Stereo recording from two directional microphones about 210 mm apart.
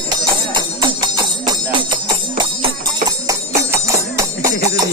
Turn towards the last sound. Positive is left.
turn(degrees=-15)  # may be behind; listen again after turning